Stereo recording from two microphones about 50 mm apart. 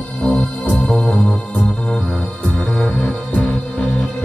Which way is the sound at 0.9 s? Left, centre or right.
Left.